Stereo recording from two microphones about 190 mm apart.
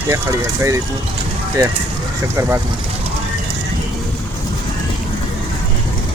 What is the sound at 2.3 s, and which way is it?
Speech, 15° right (ahead or behind).